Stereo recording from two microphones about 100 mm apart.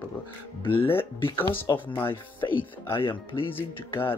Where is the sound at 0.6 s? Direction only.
20° left (ahead or behind).